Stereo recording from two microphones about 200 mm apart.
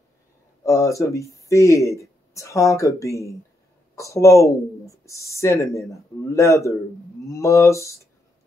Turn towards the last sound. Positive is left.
turn(degrees=15)  # may be behind; listen again after turning